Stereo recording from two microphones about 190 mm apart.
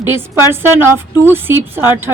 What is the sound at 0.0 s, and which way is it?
A woman's voice, 10° right (ahead or behind).